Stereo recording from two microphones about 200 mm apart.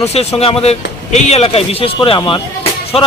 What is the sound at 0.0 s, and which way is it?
A man's voice, 30° left (ahead or behind).